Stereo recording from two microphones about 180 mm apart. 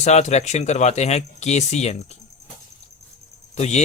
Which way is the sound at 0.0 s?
40° left (ahead or behind).